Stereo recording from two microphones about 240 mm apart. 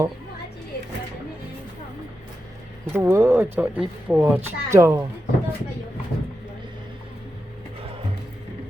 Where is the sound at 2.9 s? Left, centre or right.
Centre.